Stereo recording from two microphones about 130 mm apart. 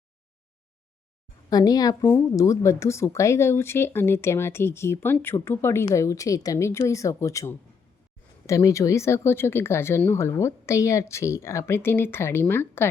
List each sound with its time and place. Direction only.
1.5 s speech: 30° left (ahead or behind)